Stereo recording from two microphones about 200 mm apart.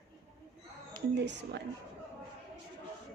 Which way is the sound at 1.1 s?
60° right (ahead or behind).